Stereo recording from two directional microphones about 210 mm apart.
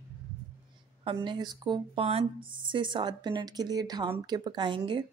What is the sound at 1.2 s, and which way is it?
Speech, 20° right (ahead or behind).